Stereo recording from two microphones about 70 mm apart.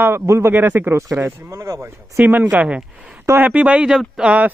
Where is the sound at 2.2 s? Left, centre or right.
Right.